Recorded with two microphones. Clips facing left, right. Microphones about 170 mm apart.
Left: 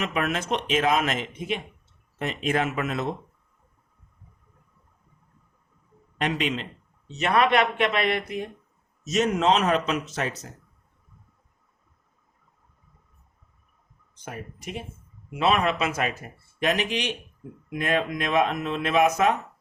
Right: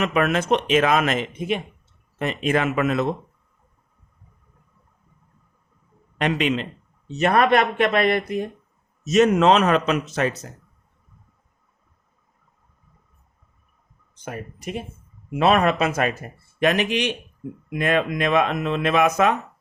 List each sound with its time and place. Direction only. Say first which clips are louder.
0.0 s speech: right 6 dB; 70° right (ahead or behind)
2.1 s speech: right 4 dB; 65° right (ahead or behind); by 3.1 s 85° right
6.1 s speech: right 5 dB; 75° right (ahead or behind)
7.2 s speech: right 3 dB; 45° right (ahead or behind)
9.0 s speech: right 6 dB; 70° right (ahead or behind)
15.4 s speech: right 5 dB; 50° right (ahead or behind)
16.6 s speech: right 5 dB; 65° right (ahead or behind)
17.7 s speech: right 4 dB; 75° right (ahead or behind)